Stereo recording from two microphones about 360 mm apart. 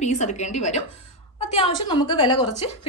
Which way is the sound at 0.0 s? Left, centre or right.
Centre.